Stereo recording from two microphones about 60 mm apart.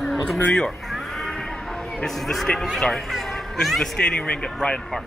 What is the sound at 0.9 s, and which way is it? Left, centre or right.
Cat, centre.